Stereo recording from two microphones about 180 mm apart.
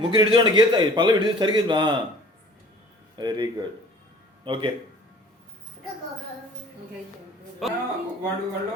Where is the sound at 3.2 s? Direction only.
25° right (ahead or behind).